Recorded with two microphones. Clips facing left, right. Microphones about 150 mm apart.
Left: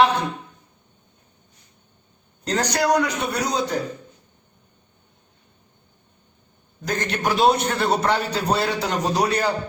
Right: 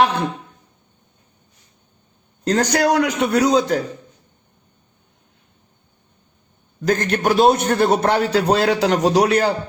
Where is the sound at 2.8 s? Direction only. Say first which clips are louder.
Even; 85° right.